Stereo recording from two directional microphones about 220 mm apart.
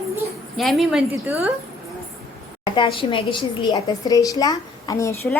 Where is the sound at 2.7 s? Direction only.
25° left (ahead or behind).